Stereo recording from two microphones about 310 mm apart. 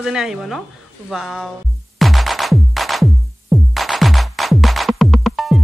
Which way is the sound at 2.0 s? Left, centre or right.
Centre.